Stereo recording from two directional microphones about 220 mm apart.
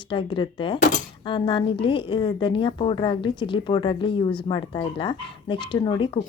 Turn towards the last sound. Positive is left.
turn(degrees=20)  # may be behind; listen again after turning